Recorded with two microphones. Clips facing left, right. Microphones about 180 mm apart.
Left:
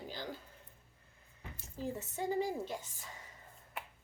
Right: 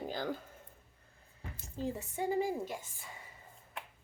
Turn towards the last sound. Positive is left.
turn(degrees=-10)  # may be behind; listen again after turning